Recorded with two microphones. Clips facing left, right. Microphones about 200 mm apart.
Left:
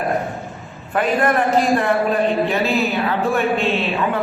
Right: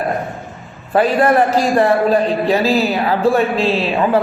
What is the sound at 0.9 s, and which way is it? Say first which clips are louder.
A man's voice: right 5 dB; 35° right (ahead or behind).